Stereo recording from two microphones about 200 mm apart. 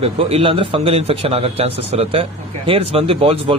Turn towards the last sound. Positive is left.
turn(degrees=-25)  # may be behind; listen again after turning